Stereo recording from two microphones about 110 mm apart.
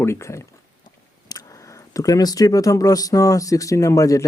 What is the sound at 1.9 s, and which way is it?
Speech, 30° left (ahead or behind).